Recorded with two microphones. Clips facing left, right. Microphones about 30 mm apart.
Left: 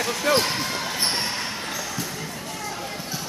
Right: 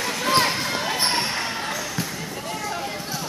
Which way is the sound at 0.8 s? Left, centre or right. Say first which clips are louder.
Right 3 dB; right.